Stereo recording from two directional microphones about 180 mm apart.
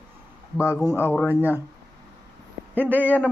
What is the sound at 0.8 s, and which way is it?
Speech, 10° left (ahead or behind).